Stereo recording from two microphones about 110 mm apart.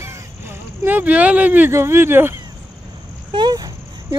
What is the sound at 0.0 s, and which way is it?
Speech, 25° right (ahead or behind).